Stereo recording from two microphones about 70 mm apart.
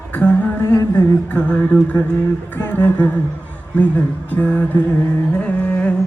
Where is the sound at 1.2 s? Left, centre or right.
Left.